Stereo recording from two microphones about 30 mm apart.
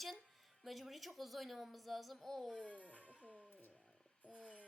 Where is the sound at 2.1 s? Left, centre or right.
Centre.